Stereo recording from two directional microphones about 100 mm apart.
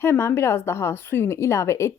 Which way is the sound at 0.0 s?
25° left (ahead or behind).